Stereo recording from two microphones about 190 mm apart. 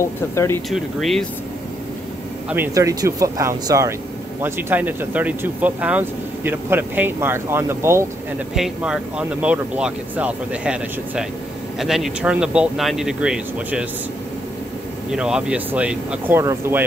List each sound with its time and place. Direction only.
0.0 s speech: 15° left (ahead or behind)
0.7 s speech: centre (ahead or behind)
2.5 s speech: 15° right (ahead or behind)
8.5 s speech: 5° right (ahead or behind)
15.0 s speech: 5° right (ahead or behind)